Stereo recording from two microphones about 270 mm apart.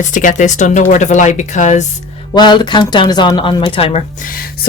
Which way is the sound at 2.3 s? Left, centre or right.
Centre.